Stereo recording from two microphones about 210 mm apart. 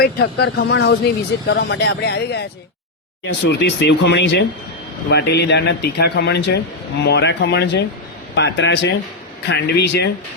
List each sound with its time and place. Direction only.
0.0 s speech: 50° left (ahead or behind)